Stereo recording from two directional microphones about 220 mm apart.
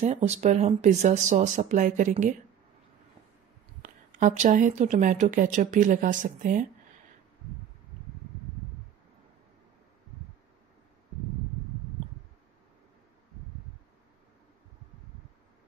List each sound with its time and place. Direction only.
0.0 s a woman's voice: 30° right (ahead or behind)
3.8 s a woman's voice: 35° right (ahead or behind)